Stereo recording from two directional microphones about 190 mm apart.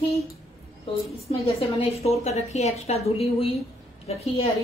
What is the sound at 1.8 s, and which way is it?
A woman's voice, 35° left (ahead or behind).